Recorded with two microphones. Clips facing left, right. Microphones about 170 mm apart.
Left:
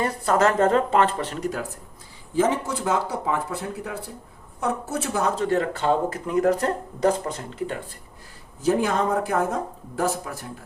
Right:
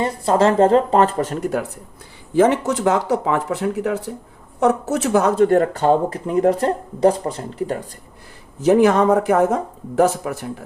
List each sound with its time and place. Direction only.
0.0 s speech: 30° right (ahead or behind); by 1.6 s 55° right (ahead or behind)
2.3 s speech: 70° right (ahead or behind)
5.5 s speech: 45° right (ahead or behind)
8.6 s speech: 75° right (ahead or behind)